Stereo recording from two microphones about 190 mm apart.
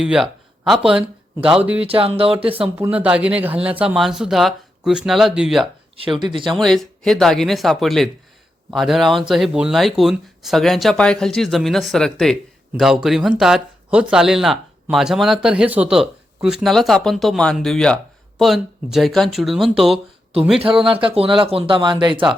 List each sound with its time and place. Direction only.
0.0 s speech: centre (ahead or behind)
1.8 s speech: 30° right (ahead or behind)
2.7 s speech: 10° right (ahead or behind)
6.0 s speech: 25° right (ahead or behind)
6.5 s speech: centre (ahead or behind)
20.6 s speech: 30° right (ahead or behind)